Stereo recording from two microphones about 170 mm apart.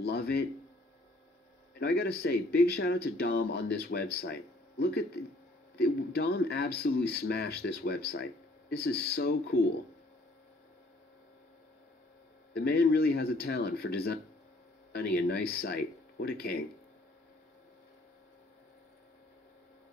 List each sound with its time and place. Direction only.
0.0 s speech: 70° left (ahead or behind)
1.8 s speech: 65° left (ahead or behind)
12.5 s speech: 65° left (ahead or behind)